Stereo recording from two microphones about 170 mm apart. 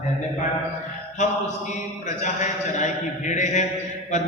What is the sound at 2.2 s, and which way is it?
A man's voice, 45° left (ahead or behind).